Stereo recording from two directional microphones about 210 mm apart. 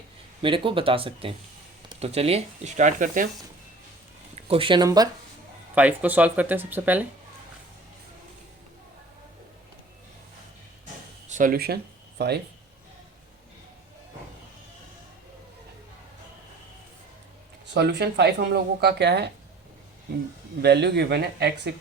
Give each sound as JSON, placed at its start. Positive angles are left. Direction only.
{"t": 0.4, "sound": "speech", "side_deg": -25}
{"t": 4.4, "sound": "speech", "side_deg": -25}
{"t": 5.7, "sound": "speech", "side_deg": -5}
{"t": 11.3, "sound": "speech", "side_deg": -40}
{"t": 17.7, "sound": "speech", "side_deg": -50}
{"t": 20.6, "sound": "speech", "side_deg": -50}